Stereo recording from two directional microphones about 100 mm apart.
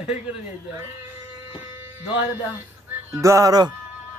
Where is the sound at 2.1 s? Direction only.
20° right (ahead or behind).